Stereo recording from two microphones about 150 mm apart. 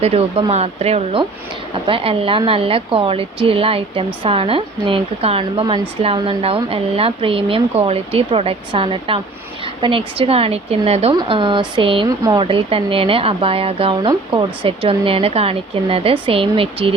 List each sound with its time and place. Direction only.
0.0 s speech: 40° right (ahead or behind)
11.2 s speech: 35° right (ahead or behind)
12.0 s speech: 25° right (ahead or behind)
12.4 s speech: 35° right (ahead or behind)